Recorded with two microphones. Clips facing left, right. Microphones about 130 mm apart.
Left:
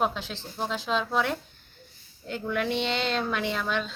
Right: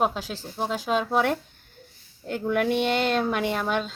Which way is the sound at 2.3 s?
50° right (ahead or behind).